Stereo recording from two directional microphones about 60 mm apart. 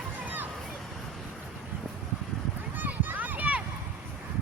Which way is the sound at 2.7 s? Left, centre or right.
Right.